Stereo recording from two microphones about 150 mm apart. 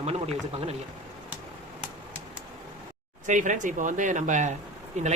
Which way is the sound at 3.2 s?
55° right (ahead or behind).